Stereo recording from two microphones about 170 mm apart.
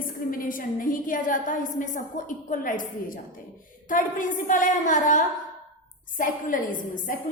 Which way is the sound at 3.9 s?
50° left (ahead or behind).